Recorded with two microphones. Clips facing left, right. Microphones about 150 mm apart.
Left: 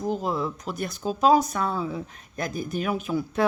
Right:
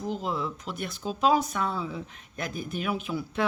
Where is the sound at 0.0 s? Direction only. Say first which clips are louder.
Left 4 dB; 45° left (ahead or behind).